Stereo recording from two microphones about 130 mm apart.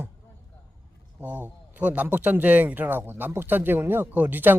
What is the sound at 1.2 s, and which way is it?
Speech, 15° right (ahead or behind).